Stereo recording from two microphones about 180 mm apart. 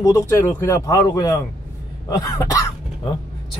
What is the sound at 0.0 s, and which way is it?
Speech, 15° left (ahead or behind).